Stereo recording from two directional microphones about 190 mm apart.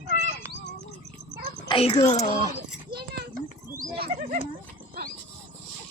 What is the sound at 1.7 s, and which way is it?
Speech, 30° left (ahead or behind).